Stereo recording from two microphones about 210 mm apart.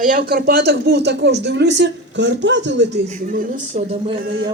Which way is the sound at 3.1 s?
35° right (ahead or behind).